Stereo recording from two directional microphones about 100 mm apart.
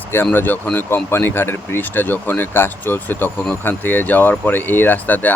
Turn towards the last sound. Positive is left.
turn(degrees=15)  # may be behind; listen again after turning